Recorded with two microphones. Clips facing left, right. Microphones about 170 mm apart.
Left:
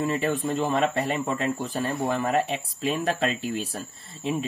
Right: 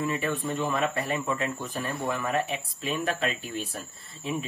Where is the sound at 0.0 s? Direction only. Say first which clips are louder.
Left 4 dB; 30° left (ahead or behind).